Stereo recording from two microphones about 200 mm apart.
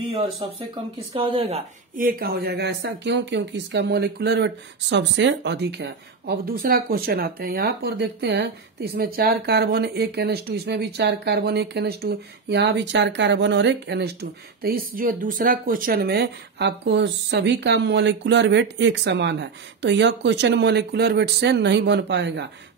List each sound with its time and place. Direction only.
0.1 s speech: 20° right (ahead or behind)
2.0 s speech: 45° right (ahead or behind)
14.6 s speech: 45° right (ahead or behind)